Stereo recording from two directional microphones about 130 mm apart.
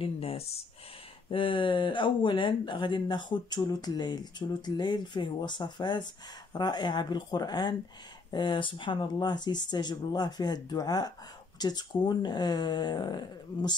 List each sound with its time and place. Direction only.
0.0 s speech: 50° left (ahead or behind)